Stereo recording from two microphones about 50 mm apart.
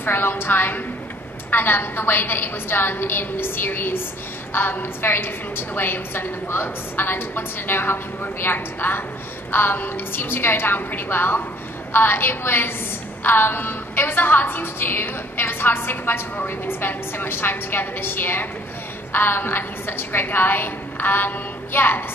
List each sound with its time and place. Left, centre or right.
0.0 s a woman's voice: left